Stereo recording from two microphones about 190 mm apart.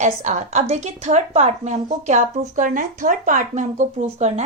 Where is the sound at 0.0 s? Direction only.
40° right (ahead or behind).